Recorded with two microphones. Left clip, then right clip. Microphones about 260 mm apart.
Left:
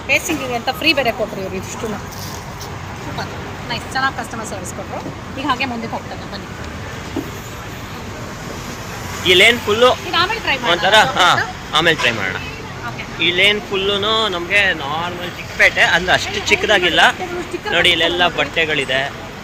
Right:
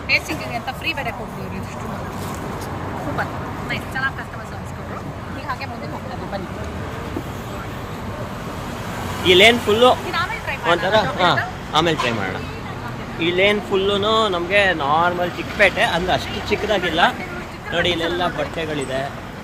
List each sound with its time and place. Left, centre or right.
0.1 s speech: left
3.7 s speech: left
9.2 s speech: centre